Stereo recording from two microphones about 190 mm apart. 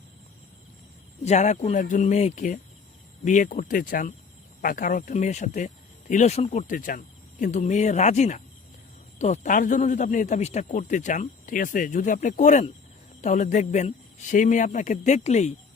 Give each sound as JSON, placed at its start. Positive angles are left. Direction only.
{"t": 1.2, "sound": "speech", "side_deg": 35}